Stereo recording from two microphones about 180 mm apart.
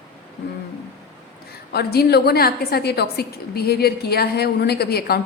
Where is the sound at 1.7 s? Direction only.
60° left (ahead or behind).